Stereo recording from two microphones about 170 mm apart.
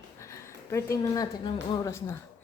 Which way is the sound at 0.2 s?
15° left (ahead or behind).